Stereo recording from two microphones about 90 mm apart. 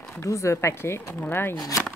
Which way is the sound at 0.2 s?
35° left (ahead or behind).